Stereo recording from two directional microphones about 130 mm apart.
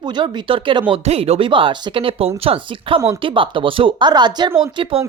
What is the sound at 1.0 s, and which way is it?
Speech, 55° right (ahead or behind).